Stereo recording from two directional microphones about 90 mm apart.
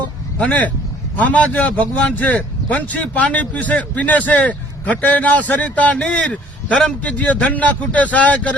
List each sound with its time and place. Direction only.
0.3 s a man's voice: 15° left (ahead or behind)